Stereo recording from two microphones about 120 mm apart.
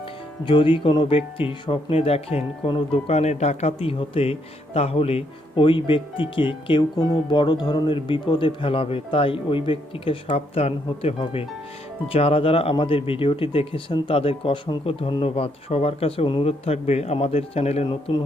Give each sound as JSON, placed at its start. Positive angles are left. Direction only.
{"t": 0.4, "sound": "speech", "side_deg": 45}
{"t": 10.2, "sound": "speech", "side_deg": 60}
{"t": 18.1, "sound": "speech", "side_deg": 45}